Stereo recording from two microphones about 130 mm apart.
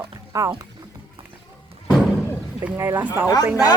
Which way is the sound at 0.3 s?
20° right (ahead or behind).